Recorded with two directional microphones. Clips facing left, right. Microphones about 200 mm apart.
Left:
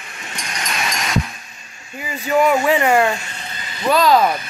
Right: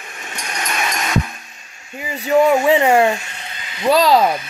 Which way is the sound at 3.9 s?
35° right (ahead or behind).